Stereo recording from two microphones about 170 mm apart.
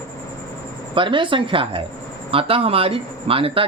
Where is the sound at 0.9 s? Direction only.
30° right (ahead or behind).